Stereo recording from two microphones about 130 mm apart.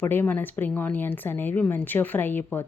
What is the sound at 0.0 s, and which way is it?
Speech, 15° left (ahead or behind).